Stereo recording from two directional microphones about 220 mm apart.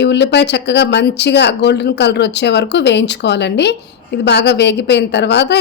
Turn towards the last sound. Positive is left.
turn(degrees=50)  # may be behind; listen again after turning